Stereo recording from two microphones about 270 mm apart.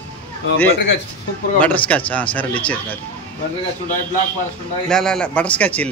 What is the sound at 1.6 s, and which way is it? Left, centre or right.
Speech, centre.